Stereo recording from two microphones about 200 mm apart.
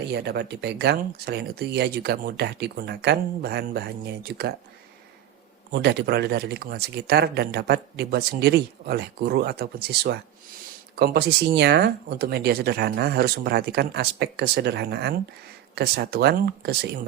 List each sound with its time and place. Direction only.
0.1 s speech: 55° right (ahead or behind)
5.7 s speech: 55° right (ahead or behind)